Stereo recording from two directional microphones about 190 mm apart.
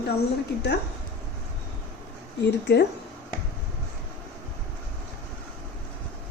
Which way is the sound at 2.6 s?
60° left (ahead or behind).